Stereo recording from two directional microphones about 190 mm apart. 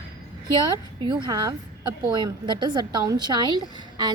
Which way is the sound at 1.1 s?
25° right (ahead or behind).